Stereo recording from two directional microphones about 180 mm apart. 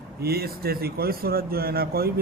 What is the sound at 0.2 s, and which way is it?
A man's voice, 60° right (ahead or behind).